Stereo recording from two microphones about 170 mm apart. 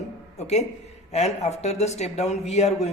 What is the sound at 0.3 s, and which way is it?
A man's voice, 40° left (ahead or behind).